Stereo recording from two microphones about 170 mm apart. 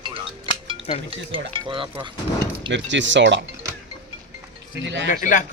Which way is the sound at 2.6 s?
90° right.